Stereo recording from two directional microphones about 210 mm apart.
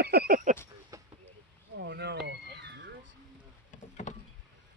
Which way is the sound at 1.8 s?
55° right (ahead or behind).